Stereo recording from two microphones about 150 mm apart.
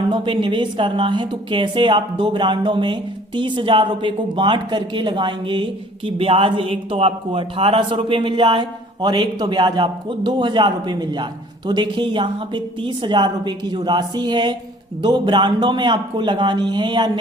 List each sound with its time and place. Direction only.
0.1 s a man's voice: 35° right (ahead or behind)